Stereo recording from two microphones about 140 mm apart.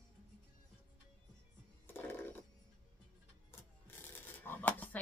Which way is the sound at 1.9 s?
15° left (ahead or behind).